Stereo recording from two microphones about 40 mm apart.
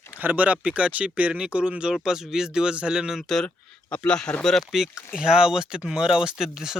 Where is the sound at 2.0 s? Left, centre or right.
Centre.